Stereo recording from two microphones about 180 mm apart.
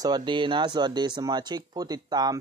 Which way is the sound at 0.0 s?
25° right (ahead or behind).